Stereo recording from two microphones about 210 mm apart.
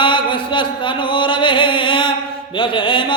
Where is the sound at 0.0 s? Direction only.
25° left (ahead or behind).